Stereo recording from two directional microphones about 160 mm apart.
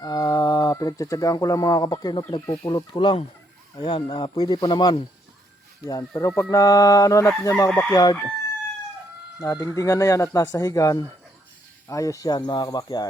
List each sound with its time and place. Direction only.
0.0 s speech: 25° left (ahead or behind)
7.7 s chicken: 5° left (ahead or behind)
9.4 s speech: 20° left (ahead or behind)